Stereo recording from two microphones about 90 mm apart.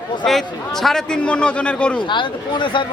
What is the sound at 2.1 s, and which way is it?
Speech, 65° left (ahead or behind).